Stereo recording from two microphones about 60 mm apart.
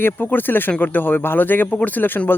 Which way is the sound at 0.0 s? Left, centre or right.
Left.